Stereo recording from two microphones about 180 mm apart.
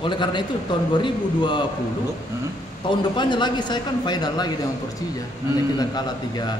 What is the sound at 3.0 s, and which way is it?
A man's voice, 25° left (ahead or behind).